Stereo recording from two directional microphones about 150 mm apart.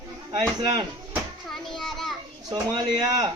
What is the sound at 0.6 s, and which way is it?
Speech, 30° right (ahead or behind).